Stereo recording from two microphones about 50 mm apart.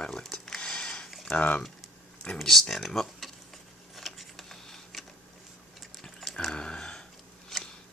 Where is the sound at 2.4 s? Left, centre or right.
Centre.